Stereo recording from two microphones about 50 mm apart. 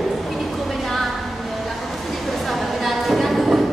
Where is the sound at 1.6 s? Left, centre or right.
Centre.